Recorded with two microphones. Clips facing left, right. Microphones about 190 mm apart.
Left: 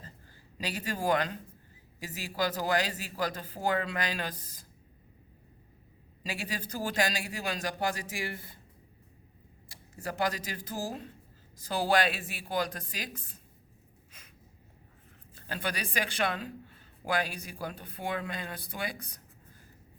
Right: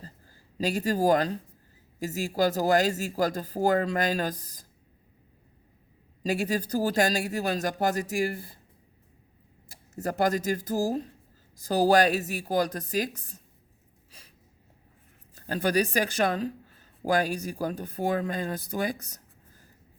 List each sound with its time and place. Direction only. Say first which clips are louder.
0.6 s speech: right 8 dB; 40° right (ahead or behind)
6.2 s speech: right 10 dB; 45° right (ahead or behind)
9.9 s speech: right 6 dB; 45° right (ahead or behind)
15.4 s speech: right 11 dB; 40° right (ahead or behind)